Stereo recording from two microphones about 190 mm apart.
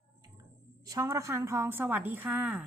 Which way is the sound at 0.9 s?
15° right (ahead or behind).